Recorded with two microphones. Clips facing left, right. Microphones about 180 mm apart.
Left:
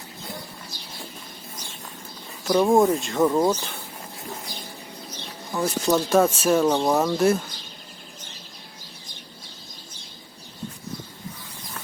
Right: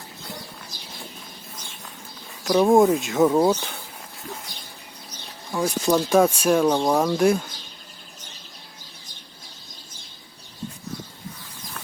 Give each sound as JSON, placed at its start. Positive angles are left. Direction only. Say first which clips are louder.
{"t": 2.4, "sound": "speech", "louder": "right 2 dB", "side_deg": 0}
{"t": 3.3, "sound": "speech", "louder": "right 2 dB", "side_deg": -15}
{"t": 5.6, "sound": "speech", "louder": "right 1 dB", "side_deg": 0}